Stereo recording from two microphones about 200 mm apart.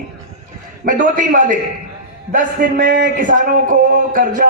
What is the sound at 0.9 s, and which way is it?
A man's voice, 40° right (ahead or behind).